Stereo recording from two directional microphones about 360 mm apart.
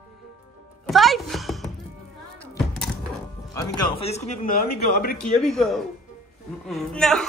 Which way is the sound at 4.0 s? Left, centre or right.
Centre.